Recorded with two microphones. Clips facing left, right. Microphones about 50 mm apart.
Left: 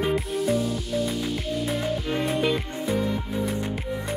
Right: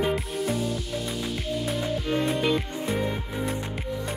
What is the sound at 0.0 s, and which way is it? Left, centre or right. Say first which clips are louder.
Music: left 2 dB; centre.